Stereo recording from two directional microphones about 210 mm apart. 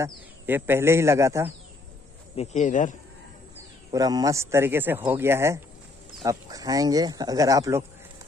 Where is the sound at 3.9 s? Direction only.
20° right (ahead or behind).